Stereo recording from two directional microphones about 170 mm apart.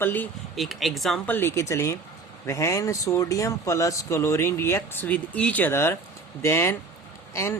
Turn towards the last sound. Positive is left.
turn(degrees=15)  # may be behind; listen again after turning